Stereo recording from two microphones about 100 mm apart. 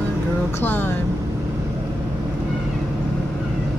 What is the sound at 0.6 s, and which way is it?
Speech, 20° left (ahead or behind).